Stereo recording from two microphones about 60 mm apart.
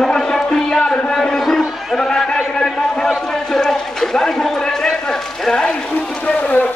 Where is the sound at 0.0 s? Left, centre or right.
Centre.